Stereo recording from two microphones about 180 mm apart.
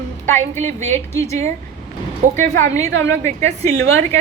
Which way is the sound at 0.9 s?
15° left (ahead or behind).